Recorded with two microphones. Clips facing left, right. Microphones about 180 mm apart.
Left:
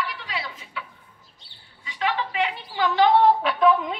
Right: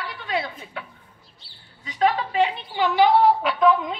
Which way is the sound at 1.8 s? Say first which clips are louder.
Right 5 dB; 40° right (ahead or behind).